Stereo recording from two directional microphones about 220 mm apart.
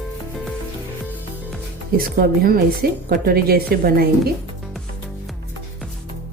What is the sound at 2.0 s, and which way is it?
A woman's voice, 40° right (ahead or behind).